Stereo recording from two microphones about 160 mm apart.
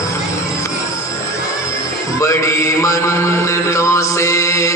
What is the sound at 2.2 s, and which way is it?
Mantra, 20° left (ahead or behind).